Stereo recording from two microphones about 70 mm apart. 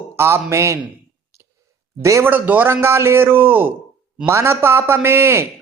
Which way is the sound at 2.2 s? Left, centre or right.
Right.